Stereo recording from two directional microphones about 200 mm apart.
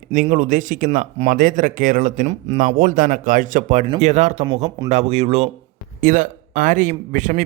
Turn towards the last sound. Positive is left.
turn(degrees=-40)  # may be behind; listen again after turning